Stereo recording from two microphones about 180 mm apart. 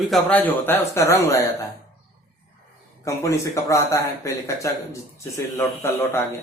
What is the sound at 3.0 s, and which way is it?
Speech, 15° left (ahead or behind).